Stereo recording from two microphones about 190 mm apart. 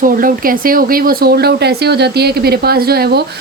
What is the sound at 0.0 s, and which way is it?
Speech, 45° right (ahead or behind).